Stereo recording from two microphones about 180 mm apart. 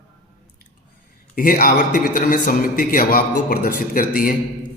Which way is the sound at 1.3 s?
50° left (ahead or behind).